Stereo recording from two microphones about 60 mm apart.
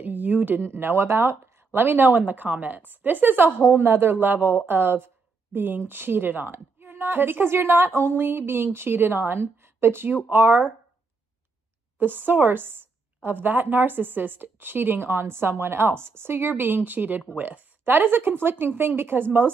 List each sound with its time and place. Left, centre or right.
0.0 s a sound: right
0.7 s speech: right
12.0 s speech: right